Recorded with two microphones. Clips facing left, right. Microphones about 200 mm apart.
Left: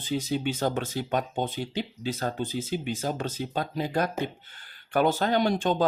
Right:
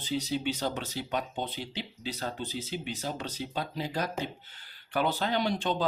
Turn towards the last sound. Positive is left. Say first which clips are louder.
# left 5 dB
turn(degrees=45)  # may be behind; listen again after turning